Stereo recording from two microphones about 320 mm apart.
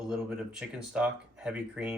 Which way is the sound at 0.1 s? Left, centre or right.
Centre.